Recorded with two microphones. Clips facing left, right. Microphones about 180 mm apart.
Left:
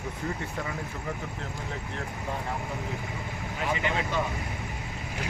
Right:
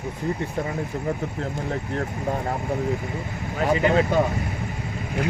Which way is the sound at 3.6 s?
40° right (ahead or behind).